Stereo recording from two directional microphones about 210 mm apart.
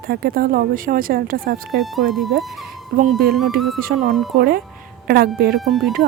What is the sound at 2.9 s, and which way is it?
Speech, 45° right (ahead or behind).